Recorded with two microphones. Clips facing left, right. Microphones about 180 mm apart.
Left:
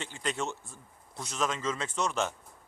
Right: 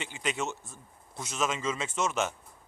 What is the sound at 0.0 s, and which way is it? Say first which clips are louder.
Speech: right 1 dB; 10° right (ahead or behind).